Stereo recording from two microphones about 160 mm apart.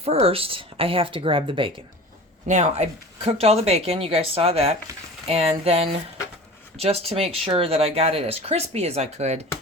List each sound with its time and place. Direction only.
0.0 s speech: 40° right (ahead or behind)
2.5 s speech: 45° right (ahead or behind)